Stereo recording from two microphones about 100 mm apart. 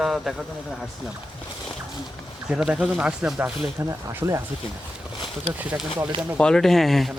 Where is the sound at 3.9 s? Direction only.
30° right (ahead or behind).